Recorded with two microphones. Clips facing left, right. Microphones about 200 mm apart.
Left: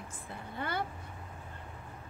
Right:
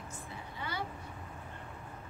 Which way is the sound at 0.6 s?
55° left (ahead or behind).